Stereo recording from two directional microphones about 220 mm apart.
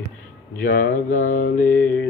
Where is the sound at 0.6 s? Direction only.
40° left (ahead or behind).